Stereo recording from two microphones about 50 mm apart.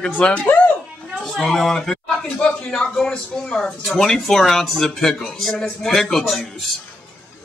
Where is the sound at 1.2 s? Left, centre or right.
Centre.